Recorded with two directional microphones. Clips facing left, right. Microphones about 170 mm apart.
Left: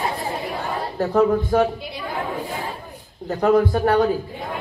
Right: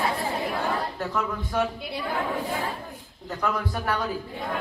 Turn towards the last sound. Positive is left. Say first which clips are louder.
# left 11 dB
turn(degrees=50)  # may be behind; listen again after turning